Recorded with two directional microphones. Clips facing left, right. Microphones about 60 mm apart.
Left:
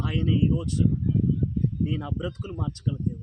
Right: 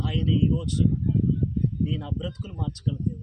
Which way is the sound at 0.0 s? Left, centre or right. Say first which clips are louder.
Even; left.